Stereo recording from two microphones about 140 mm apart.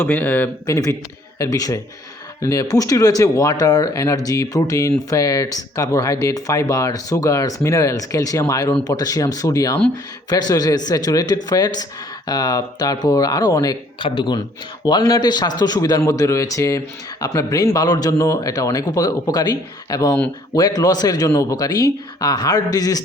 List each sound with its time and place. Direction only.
0.0 s speech: 15° left (ahead or behind)
1.4 s speech: 25° left (ahead or behind)